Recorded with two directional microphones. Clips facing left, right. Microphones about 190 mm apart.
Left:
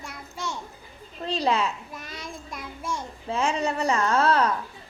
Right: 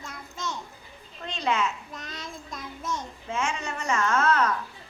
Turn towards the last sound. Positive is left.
turn(degrees=30)  # may be behind; listen again after turning